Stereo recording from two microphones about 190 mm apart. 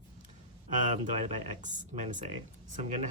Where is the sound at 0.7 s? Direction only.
40° right (ahead or behind).